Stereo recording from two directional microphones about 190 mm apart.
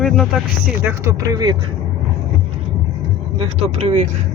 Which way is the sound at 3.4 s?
35° right (ahead or behind).